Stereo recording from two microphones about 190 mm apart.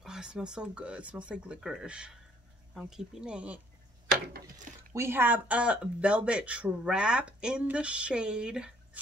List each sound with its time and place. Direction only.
0.0 s speech: 5° right (ahead or behind)
4.9 s speech: 10° right (ahead or behind)